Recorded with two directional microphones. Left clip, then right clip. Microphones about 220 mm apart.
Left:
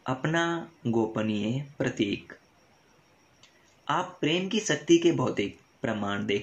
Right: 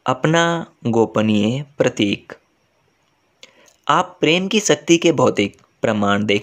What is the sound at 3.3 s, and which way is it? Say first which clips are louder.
Speech: right 15 dB; 50° right (ahead or behind).